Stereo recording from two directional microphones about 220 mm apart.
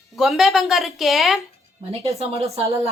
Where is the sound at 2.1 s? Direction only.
30° right (ahead or behind).